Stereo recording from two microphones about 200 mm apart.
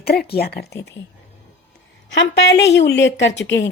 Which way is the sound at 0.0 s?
50° left (ahead or behind).